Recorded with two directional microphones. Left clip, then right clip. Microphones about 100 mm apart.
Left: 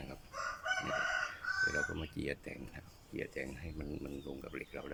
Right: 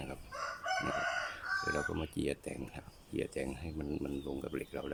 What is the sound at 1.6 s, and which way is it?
Speech, 35° right (ahead or behind).